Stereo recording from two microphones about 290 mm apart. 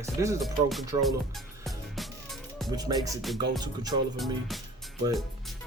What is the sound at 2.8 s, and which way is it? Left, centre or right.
Music, centre.